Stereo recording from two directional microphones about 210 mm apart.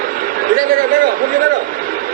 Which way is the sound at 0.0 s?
40° right (ahead or behind).